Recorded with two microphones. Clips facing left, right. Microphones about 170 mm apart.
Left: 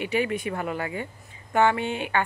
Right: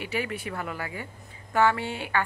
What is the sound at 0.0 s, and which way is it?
A woman's voice, 20° left (ahead or behind).